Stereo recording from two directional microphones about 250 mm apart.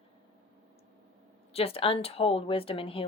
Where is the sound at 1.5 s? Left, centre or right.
Left.